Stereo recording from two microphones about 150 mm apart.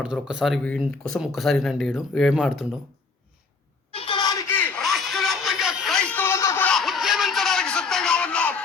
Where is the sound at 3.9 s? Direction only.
35° left (ahead or behind); by 4.7 s 15° left (ahead or behind).